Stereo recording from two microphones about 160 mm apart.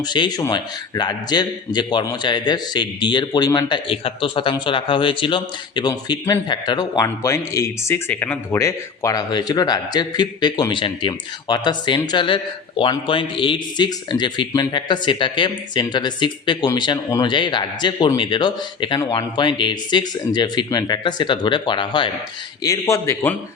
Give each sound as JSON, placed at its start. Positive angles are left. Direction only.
{"t": 0.0, "sound": "a man's voice", "side_deg": 25}
{"t": 22.6, "sound": "a man's voice", "side_deg": 20}